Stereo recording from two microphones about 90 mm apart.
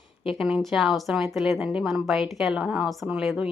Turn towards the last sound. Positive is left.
turn(degrees=-10)  # may be behind; listen again after turning